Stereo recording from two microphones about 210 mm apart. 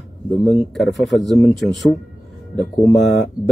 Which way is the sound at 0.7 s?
Centre (ahead or behind).